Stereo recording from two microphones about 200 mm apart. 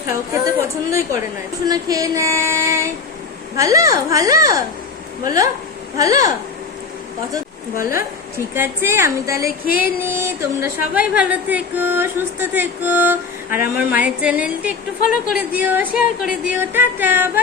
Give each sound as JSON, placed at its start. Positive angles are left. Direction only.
{"t": 0.4, "sound": "a woman's voice", "side_deg": -15}
{"t": 8.5, "sound": "a woman's voice", "side_deg": -10}